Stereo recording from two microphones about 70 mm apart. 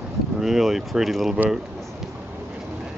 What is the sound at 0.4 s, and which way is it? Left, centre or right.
Speech, centre.